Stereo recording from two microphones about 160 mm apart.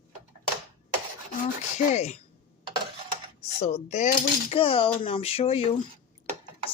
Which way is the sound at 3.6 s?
45° left (ahead or behind).